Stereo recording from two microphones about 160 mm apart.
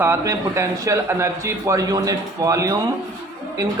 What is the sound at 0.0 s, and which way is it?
A man's voice, 15° right (ahead or behind).